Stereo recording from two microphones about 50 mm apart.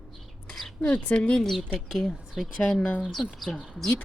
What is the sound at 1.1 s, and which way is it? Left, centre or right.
Speech, left.